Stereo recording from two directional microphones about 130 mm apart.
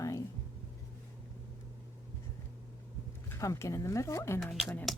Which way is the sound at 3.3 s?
20° left (ahead or behind).